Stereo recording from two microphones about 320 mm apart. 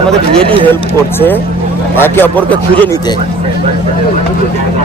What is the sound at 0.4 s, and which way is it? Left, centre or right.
Speech, centre.